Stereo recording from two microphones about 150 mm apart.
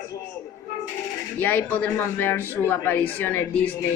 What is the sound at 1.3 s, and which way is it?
A woman's voice, 10° left (ahead or behind).